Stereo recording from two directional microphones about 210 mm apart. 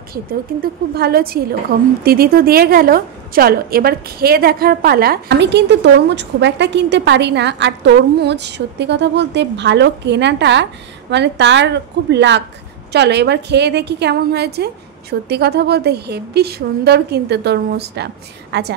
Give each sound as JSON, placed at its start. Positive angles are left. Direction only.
{"t": 0.1, "sound": "a woman's voice", "side_deg": -45}